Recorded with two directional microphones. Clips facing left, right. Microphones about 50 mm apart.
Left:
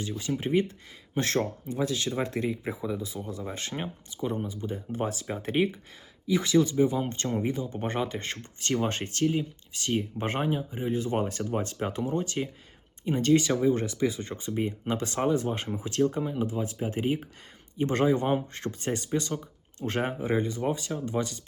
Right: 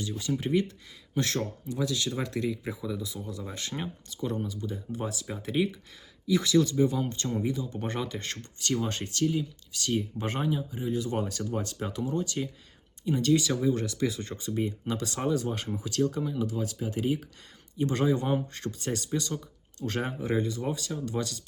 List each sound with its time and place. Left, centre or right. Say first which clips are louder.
0.2 s speech: left 1 dB; left
7.0 s speech: left 1 dB; left